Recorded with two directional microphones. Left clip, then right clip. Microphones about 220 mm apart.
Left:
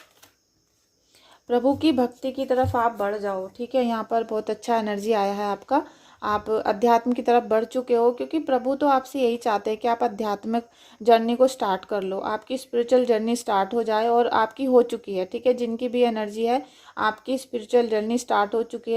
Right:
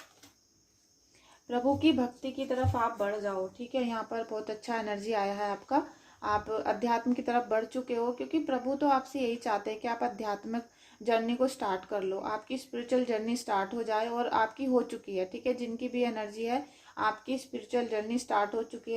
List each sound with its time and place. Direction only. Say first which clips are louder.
1.5 s speech: left 7 dB; 45° left (ahead or behind)